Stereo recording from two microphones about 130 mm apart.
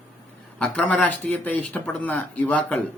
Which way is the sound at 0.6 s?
10° left (ahead or behind).